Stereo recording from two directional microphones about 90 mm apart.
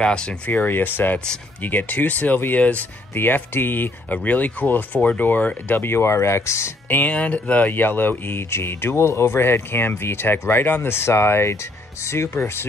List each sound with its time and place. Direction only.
0.0 s speech: 10° left (ahead or behind); by 7.0 s 30° left (ahead or behind)
7.0 s speech: 15° left (ahead or behind)